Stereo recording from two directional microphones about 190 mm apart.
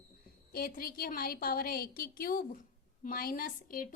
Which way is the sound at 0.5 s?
50° left (ahead or behind).